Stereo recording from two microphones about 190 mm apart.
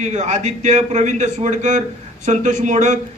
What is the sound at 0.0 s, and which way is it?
A man's voice, 40° right (ahead or behind).